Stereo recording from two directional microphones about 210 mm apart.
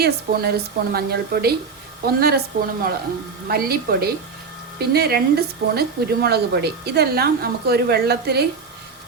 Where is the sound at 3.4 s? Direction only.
45° right (ahead or behind).